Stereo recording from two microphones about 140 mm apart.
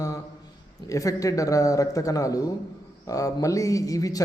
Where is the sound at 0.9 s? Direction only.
25° left (ahead or behind).